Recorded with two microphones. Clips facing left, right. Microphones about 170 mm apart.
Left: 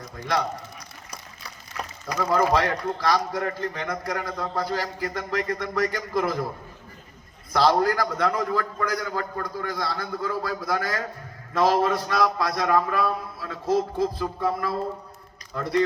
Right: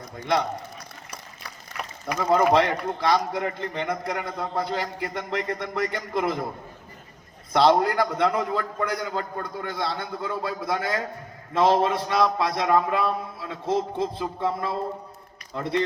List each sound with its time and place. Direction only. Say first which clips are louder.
2.0 s a man's voice: right 2 dB; 20° right (ahead or behind)
7.5 s a man's voice: right 1 dB; 25° right (ahead or behind)